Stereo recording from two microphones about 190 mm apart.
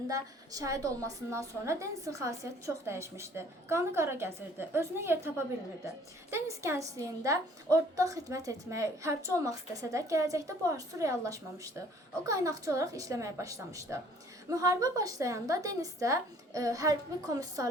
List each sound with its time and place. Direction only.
0.1 s a woman's voice: 20° right (ahead or behind)